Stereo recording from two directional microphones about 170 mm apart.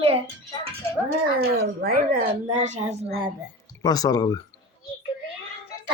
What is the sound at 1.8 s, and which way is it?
Speech, 60° right (ahead or behind).